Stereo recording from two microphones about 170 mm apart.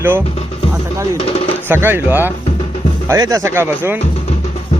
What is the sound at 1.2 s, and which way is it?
Speech, 35° left (ahead or behind).